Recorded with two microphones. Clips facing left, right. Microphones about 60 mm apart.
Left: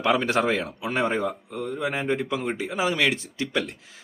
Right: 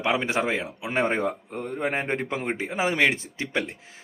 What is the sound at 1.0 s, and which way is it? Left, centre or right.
Speech, right.